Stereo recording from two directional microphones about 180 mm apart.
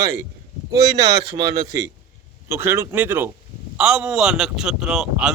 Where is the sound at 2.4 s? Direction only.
15° right (ahead or behind).